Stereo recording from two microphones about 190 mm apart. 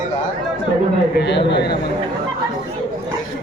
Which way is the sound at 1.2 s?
65° left (ahead or behind).